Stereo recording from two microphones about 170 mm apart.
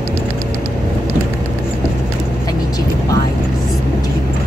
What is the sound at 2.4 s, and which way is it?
Vehicle, 20° left (ahead or behind).